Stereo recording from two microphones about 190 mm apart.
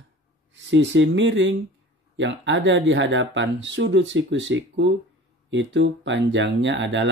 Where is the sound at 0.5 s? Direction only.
75° right (ahead or behind).